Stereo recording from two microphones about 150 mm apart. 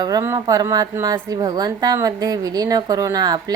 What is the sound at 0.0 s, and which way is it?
A woman's voice, 25° right (ahead or behind).